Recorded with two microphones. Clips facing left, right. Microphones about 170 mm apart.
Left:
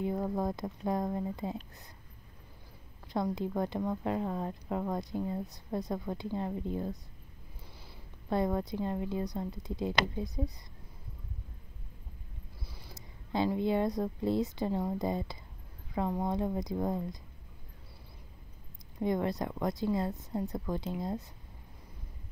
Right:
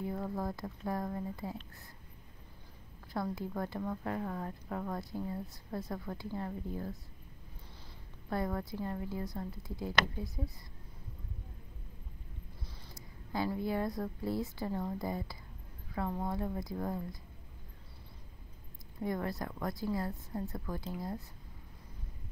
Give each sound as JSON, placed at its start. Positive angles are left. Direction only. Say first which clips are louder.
{"t": 0.0, "sound": "a woman's voice", "louder": "left 5 dB", "side_deg": 20}
{"t": 3.1, "sound": "a woman's voice", "louder": "left 5 dB", "side_deg": 20}
{"t": 8.3, "sound": "a woman's voice", "louder": "left 5 dB", "side_deg": 20}
{"t": 12.9, "sound": "a woman's voice", "louder": "left 4 dB", "side_deg": 20}
{"t": 18.9, "sound": "a woman's voice", "louder": "left 5 dB", "side_deg": 20}